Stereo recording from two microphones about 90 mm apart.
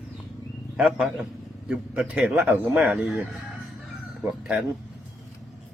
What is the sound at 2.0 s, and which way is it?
Speech, 15° right (ahead or behind).